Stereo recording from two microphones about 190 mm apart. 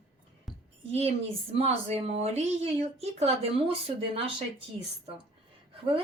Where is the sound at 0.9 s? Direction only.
35° right (ahead or behind).